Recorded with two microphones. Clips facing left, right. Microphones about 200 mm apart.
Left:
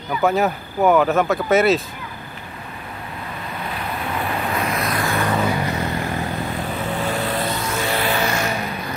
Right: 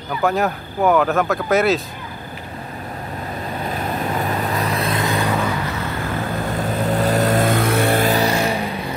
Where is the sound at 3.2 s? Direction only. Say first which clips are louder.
Right 4 dB; 35° right (ahead or behind).